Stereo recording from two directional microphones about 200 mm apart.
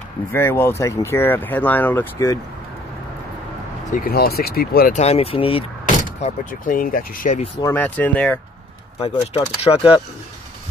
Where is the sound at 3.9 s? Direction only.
45° left (ahead or behind).